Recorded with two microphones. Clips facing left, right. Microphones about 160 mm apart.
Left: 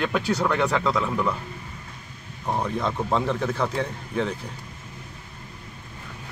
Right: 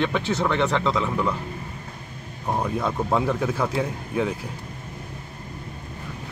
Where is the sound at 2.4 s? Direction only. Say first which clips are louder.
Right 1 dB; 10° right (ahead or behind).